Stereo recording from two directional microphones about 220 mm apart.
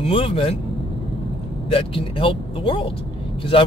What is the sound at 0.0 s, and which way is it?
Speech, 25° left (ahead or behind).